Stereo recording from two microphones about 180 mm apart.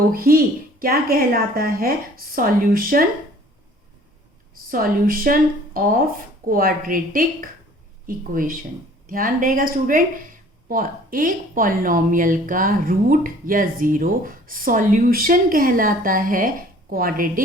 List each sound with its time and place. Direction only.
0.1 s speech: 55° right (ahead or behind)
4.7 s speech: 50° right (ahead or behind)